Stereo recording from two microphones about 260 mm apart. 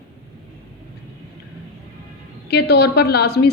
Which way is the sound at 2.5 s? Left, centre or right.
Left.